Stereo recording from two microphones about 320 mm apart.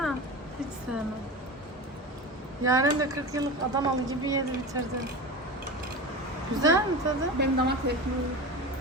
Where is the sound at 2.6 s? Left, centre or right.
Centre.